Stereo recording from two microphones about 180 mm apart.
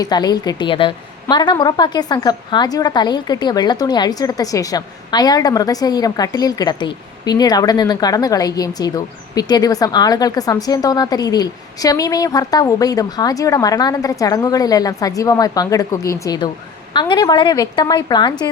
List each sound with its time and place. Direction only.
0.0 s a woman's voice: 20° left (ahead or behind)